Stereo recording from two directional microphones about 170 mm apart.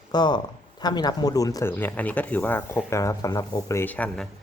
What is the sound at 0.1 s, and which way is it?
A man's voice, 25° left (ahead or behind).